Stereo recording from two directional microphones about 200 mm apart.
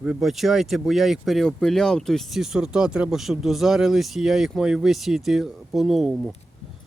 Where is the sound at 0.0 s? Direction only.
5° right (ahead or behind).